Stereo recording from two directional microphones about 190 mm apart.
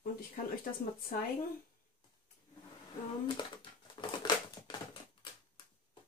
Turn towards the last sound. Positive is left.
turn(degrees=25)  # may be behind; listen again after turning